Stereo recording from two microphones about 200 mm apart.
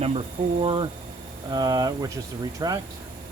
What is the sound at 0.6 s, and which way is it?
Speech, 25° right (ahead or behind).